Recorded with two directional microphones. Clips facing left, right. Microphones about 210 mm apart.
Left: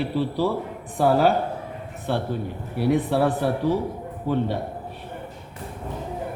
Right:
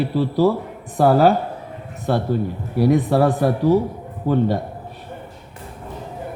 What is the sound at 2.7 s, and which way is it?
A man's voice, 40° right (ahead or behind).